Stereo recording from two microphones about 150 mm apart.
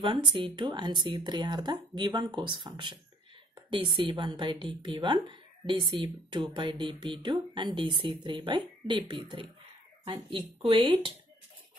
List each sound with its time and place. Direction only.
0.0 s speech: 35° right (ahead or behind)